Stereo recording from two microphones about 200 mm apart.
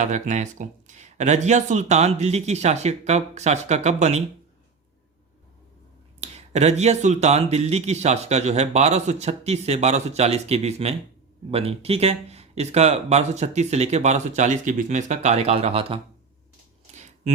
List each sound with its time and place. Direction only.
0.0 s speech: 35° right (ahead or behind)
6.1 s speech: 35° right (ahead or behind)
16.9 s a sound: 35° right (ahead or behind)